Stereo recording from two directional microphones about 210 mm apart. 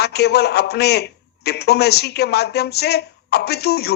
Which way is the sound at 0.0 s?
50° left (ahead or behind).